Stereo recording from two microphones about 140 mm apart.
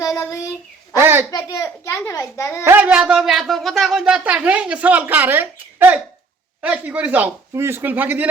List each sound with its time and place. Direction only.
0.0 s child singing: 25° left (ahead or behind)
0.9 s speech: 15° right (ahead or behind)
1.3 s a child's voice: 25° left (ahead or behind)
2.6 s speech: 10° right (ahead or behind)